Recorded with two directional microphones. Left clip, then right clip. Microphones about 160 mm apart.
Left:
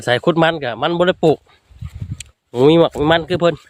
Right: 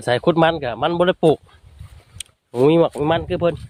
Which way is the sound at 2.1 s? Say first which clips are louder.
Left 2 dB; 25° left (ahead or behind).